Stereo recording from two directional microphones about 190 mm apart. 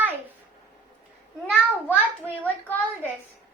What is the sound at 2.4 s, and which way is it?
Speech, 10° left (ahead or behind).